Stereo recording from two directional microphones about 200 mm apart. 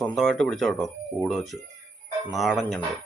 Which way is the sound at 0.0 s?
Centre (ahead or behind).